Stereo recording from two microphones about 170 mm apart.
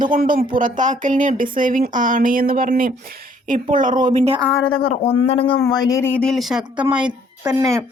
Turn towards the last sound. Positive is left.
turn(degrees=-20)  # may be behind; listen again after turning